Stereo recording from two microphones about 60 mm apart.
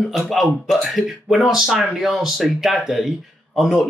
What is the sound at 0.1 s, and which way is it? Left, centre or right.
Speech, centre.